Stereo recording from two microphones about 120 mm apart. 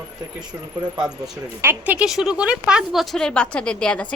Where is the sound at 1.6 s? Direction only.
15° right (ahead or behind); by 4.0 s 10° left (ahead or behind).